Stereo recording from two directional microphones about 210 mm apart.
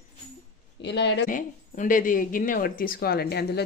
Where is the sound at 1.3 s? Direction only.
40° left (ahead or behind).